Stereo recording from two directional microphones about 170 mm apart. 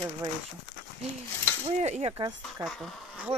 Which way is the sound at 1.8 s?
40° right (ahead or behind).